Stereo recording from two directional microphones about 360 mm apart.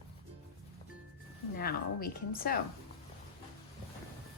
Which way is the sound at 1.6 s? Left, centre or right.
Left.